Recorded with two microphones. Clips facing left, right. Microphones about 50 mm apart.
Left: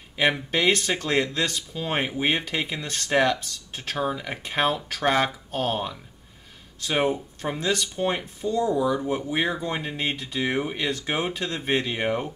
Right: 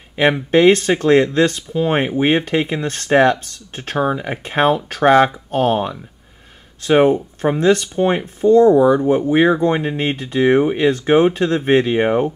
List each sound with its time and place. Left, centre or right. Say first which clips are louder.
0.5 s speech: right 11 dB; right
7.4 s speech: right 11 dB; right
8.4 s speech: right 15 dB; right
9.3 s speech: right 13 dB; right